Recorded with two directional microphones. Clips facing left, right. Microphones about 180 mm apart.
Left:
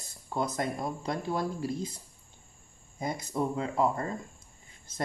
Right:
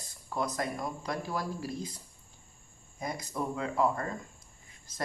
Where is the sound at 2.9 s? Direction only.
25° left (ahead or behind).